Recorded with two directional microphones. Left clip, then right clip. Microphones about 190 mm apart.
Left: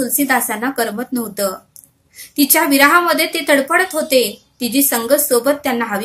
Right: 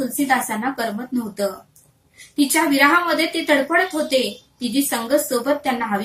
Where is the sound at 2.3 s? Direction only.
45° left (ahead or behind).